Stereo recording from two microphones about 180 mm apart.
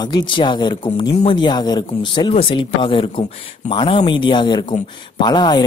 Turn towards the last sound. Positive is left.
turn(degrees=25)  # may be behind; listen again after turning